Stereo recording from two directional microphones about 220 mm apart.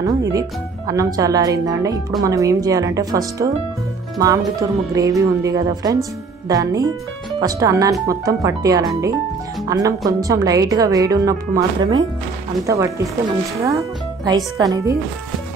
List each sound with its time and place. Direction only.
0.0 s a woman's voice: 15° right (ahead or behind)